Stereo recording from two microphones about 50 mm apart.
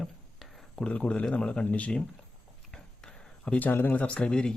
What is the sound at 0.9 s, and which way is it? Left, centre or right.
Speech, left.